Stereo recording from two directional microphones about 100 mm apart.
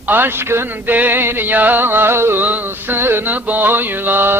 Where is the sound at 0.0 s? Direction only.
20° right (ahead or behind).